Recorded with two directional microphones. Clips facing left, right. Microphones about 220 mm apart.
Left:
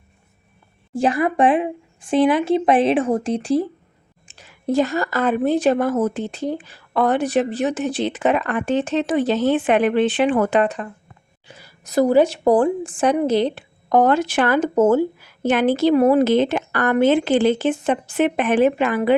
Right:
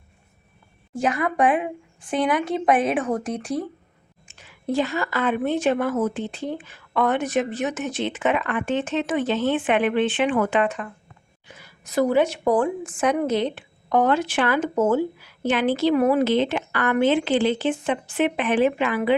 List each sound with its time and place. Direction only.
0.9 s a woman's voice: 30° left (ahead or behind)